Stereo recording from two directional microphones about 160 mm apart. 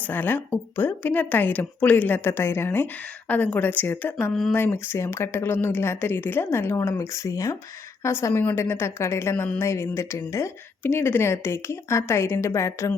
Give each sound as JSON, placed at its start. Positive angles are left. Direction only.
{"t": 0.0, "sound": "a woman's voice", "side_deg": 10}